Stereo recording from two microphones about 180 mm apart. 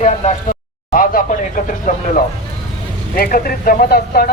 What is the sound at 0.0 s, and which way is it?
Speech, 45° left (ahead or behind).